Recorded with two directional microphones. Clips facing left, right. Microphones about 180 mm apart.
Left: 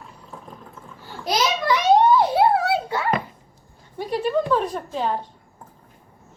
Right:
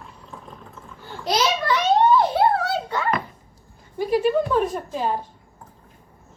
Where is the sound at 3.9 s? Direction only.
5° right (ahead or behind).